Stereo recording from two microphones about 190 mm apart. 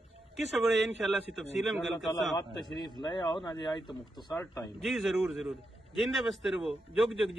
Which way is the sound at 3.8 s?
Centre (ahead or behind).